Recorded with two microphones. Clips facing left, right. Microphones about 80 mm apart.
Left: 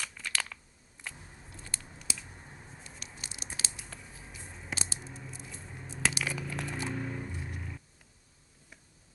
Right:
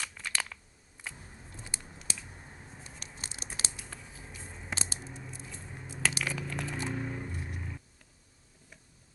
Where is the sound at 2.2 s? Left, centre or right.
Centre.